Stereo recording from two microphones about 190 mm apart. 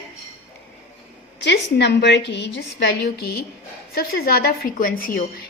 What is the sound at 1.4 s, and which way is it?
A woman's voice, 65° left (ahead or behind).